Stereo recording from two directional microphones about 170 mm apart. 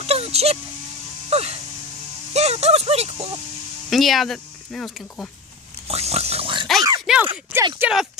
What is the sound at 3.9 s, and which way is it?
Speech, centre (ahead or behind).